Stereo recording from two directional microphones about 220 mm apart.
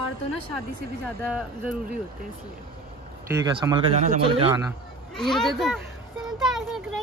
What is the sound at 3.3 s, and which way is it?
Speech, 15° right (ahead or behind).